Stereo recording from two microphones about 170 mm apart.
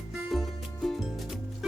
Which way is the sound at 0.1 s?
Centre (ahead or behind).